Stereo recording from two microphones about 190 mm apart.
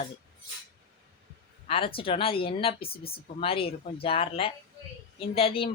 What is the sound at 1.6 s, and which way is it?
Speech, 30° left (ahead or behind).